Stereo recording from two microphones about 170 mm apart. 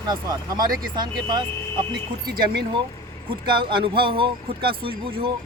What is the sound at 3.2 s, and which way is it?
Speech, 30° right (ahead or behind).